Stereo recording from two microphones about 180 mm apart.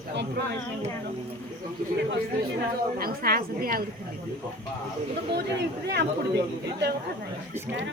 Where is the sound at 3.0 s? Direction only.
55° right (ahead or behind).